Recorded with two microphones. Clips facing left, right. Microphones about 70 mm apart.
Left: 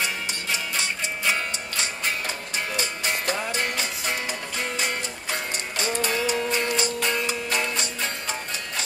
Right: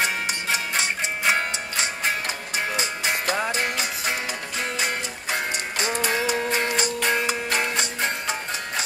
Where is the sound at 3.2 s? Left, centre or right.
Right.